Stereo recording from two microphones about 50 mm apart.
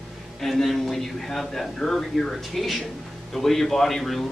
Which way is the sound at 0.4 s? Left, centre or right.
Centre.